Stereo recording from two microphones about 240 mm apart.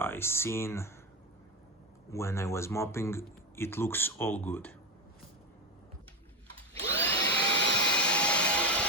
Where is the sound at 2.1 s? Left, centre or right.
Centre.